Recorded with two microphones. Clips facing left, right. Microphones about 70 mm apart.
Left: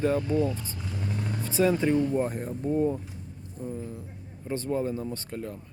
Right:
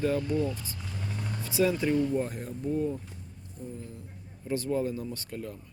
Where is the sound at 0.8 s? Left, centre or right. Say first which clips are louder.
Left 6 dB; centre.